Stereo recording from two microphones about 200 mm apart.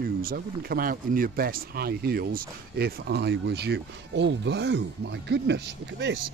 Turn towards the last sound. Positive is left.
turn(degrees=-60)  # may be behind; listen again after turning